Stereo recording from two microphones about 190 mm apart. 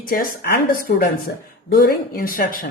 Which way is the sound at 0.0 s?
50° left (ahead or behind).